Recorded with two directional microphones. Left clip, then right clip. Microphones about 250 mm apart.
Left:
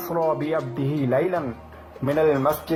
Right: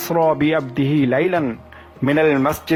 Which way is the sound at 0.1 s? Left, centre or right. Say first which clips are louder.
Right 7 dB; right.